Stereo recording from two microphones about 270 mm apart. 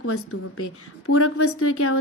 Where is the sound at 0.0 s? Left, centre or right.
Left.